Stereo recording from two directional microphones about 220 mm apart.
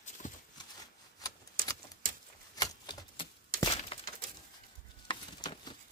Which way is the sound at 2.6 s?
20° left (ahead or behind).